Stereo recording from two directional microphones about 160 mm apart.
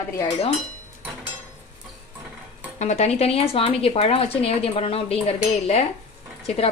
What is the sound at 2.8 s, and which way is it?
A woman's voice, 45° left (ahead or behind).